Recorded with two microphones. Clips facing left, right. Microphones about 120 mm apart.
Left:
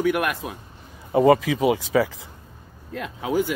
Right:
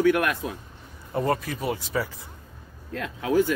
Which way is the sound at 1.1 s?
90° left.